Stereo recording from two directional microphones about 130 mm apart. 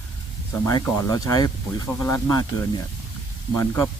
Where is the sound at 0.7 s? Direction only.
25° left (ahead or behind).